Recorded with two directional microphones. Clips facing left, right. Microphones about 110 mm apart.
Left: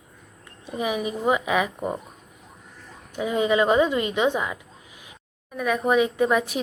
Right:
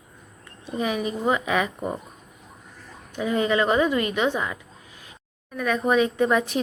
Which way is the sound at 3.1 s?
15° left (ahead or behind).